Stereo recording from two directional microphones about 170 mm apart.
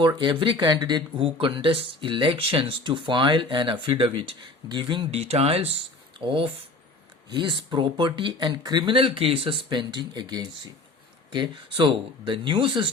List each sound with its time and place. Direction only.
0.0 s speech: 25° right (ahead or behind)